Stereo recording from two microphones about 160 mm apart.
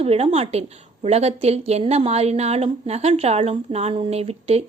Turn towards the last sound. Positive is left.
turn(degrees=-40)  # may be behind; listen again after turning